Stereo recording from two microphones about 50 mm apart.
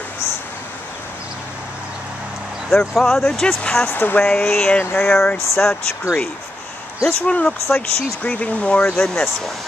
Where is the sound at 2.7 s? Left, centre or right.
Centre.